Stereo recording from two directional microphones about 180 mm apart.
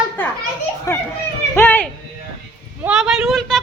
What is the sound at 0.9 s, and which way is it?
Speech, 15° left (ahead or behind).